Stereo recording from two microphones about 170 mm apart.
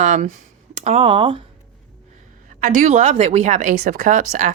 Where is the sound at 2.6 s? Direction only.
50° right (ahead or behind).